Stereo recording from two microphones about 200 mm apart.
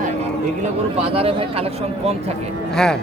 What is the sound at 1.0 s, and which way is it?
Speech, 30° right (ahead or behind).